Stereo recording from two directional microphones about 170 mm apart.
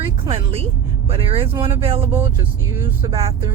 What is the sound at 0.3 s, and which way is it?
Speech, 35° right (ahead or behind).